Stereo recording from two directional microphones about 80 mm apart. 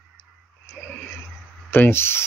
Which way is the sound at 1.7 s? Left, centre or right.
Left.